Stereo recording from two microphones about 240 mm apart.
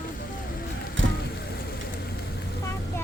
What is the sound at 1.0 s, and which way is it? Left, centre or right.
Vehicle, right.